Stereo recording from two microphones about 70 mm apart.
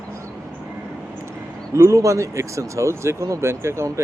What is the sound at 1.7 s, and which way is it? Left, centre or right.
Speech, right.